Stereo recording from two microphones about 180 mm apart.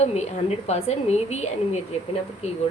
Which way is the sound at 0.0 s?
35° left (ahead or behind).